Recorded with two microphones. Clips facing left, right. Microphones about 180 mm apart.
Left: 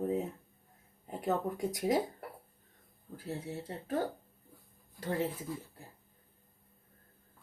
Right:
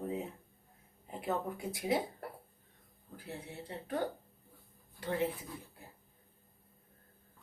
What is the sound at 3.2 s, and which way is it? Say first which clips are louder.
Speech: left 5 dB; 40° left (ahead or behind).